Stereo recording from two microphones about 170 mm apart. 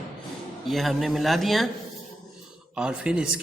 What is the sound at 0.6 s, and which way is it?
Speech, centre (ahead or behind).